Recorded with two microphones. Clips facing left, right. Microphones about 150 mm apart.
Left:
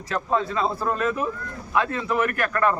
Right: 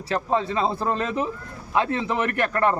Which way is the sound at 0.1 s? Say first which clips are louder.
Right 1 dB; 25° right (ahead or behind).